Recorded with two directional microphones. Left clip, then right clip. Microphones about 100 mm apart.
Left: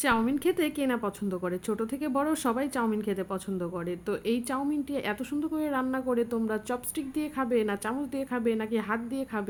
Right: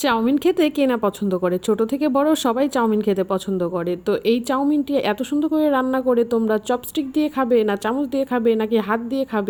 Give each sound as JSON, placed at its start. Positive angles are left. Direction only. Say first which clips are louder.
{"t": 0.3, "sound": "a woman's voice", "louder": "right 10 dB", "side_deg": -60}